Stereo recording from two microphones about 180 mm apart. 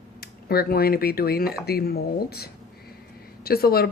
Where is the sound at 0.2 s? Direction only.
60° left (ahead or behind).